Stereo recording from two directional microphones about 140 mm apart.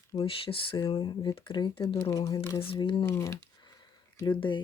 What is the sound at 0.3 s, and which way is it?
Speech, 40° left (ahead or behind).